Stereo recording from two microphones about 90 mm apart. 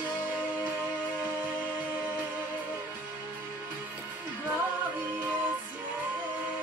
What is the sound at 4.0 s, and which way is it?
Music, 20° right (ahead or behind).